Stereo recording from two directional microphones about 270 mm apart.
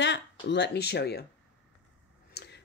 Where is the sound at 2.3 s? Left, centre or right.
Left.